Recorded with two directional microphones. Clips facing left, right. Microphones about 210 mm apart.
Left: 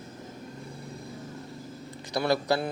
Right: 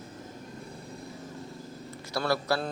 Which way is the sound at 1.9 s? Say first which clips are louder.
Left 3 dB; 15° left (ahead or behind).